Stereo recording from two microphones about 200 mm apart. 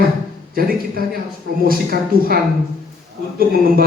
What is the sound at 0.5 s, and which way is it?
A man's voice, 45° right (ahead or behind).